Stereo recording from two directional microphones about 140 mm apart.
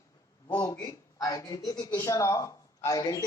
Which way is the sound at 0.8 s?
25° left (ahead or behind).